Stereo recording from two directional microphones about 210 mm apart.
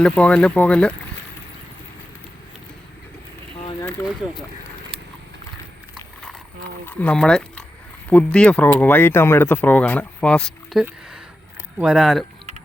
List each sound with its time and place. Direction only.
0.0 s speech: 5° left (ahead or behind)
3.7 s a sound: 15° left (ahead or behind)
6.8 s speech: 5° left (ahead or behind)